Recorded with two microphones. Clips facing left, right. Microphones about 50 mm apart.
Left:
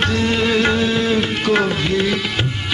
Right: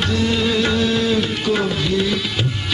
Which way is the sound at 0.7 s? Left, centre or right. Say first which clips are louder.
Left 1 dB; left.